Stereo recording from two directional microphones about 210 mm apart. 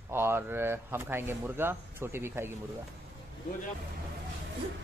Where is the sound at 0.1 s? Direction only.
10° right (ahead or behind).